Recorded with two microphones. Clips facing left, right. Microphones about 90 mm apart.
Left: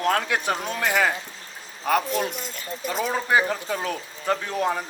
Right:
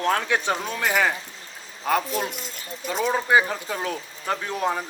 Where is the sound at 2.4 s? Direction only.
40° left (ahead or behind).